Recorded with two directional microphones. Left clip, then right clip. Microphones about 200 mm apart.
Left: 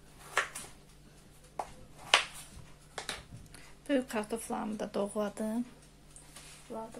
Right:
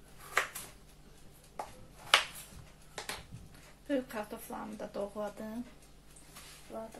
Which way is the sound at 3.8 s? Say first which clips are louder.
Left 3 dB; 55° left (ahead or behind).